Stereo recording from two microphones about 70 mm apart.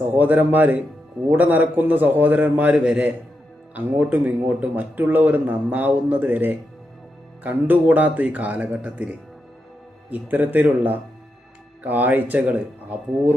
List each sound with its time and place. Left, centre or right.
0.1 s speech: right